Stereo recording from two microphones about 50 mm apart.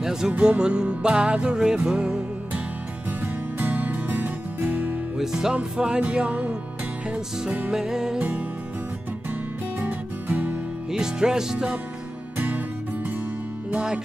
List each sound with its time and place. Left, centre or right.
0.0 s music: centre
3.1 s music: right
5.1 s music: centre
5.6 s music: right
7.7 s music: centre
8.2 s music: right
10.9 s music: centre
12.4 s music: right